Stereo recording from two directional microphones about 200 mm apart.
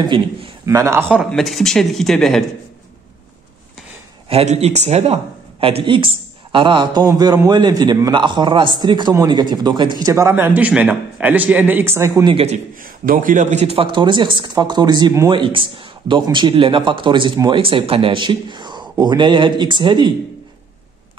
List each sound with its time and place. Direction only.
0.0 s speech: 20° right (ahead or behind)
1.3 s speech: centre (ahead or behind)
4.3 s speech: 30° right (ahead or behind); by 12.4 s 15° right (ahead or behind)
12.8 s speech: 45° right (ahead or behind); by 20.1 s 25° right (ahead or behind)